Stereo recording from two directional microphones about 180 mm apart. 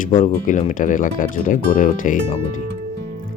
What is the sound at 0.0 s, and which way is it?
Speech, 50° left (ahead or behind).